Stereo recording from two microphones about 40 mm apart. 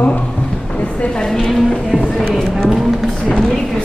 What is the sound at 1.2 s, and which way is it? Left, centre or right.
Speech, centre.